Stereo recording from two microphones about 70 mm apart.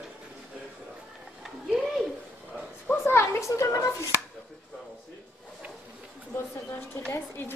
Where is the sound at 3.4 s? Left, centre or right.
Left.